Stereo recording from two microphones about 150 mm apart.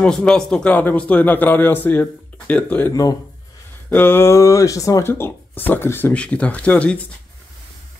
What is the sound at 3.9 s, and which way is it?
Speech, 15° left (ahead or behind).